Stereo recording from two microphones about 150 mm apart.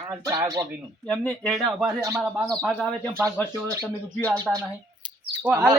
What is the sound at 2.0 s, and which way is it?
Speech, 20° right (ahead or behind).